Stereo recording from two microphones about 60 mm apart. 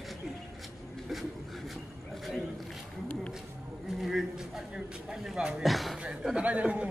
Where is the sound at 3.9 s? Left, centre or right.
Centre.